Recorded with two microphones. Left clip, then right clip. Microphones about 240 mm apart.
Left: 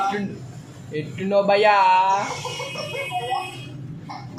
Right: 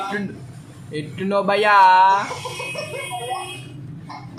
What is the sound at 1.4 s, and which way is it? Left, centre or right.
Speech, right.